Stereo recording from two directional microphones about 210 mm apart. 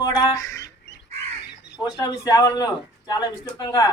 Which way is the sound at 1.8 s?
15° left (ahead or behind).